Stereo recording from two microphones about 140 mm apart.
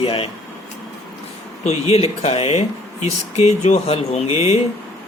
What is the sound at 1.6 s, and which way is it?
Speech, 50° left (ahead or behind).